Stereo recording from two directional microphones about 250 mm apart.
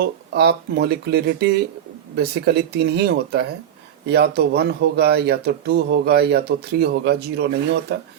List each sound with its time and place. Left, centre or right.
0.0 s speech: right